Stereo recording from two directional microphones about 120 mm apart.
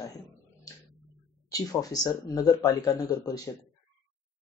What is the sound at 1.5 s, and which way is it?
Speech, 30° left (ahead or behind).